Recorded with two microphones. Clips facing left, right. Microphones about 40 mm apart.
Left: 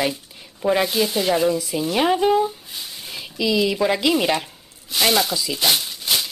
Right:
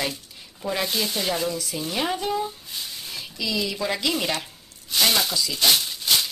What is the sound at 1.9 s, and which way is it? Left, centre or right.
Speech, left.